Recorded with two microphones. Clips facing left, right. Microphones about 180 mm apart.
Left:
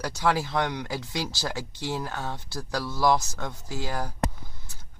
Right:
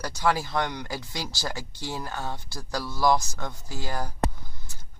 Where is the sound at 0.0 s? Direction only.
5° left (ahead or behind).